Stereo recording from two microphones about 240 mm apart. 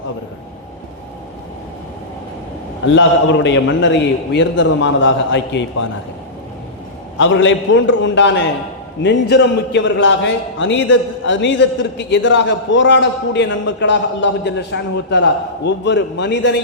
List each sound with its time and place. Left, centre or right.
2.8 s a man's voice: left
7.2 s a man's voice: left